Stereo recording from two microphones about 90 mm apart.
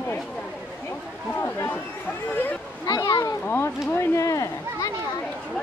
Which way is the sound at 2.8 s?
45° left (ahead or behind).